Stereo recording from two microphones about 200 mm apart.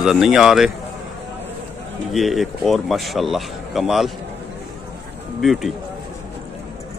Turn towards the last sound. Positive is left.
turn(degrees=0)  # may be behind; listen again after turning